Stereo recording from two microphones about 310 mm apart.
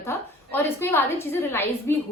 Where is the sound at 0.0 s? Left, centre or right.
Centre.